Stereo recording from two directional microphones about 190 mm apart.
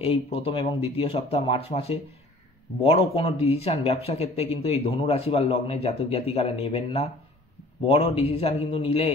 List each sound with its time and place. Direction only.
0.0 s speech: 30° left (ahead or behind)